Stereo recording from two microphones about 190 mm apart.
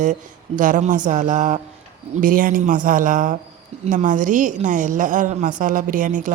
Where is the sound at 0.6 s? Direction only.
45° right (ahead or behind).